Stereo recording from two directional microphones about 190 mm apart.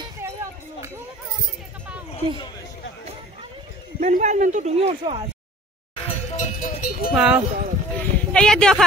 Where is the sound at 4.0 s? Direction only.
40° right (ahead or behind).